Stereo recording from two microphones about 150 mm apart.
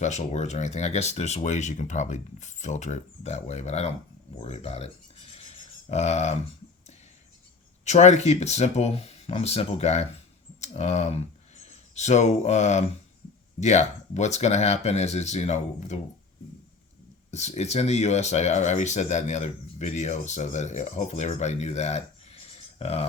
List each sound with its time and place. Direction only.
0.0 s speech: 50° left (ahead or behind)
5.5 s a sound: 50° left (ahead or behind)
7.9 s speech: 50° left (ahead or behind)
17.3 s speech: 50° left (ahead or behind)